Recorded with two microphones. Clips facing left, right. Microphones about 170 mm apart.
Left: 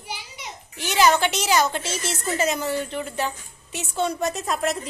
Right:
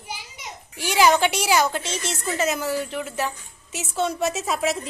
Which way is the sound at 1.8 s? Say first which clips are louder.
Even; 5° left (ahead or behind).